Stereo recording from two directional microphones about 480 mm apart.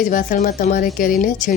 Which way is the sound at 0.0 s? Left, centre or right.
Centre.